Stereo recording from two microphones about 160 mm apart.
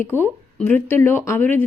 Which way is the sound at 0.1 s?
10° left (ahead or behind).